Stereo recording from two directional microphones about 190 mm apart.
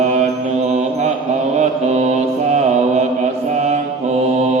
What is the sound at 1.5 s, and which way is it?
Mantra, 35° right (ahead or behind).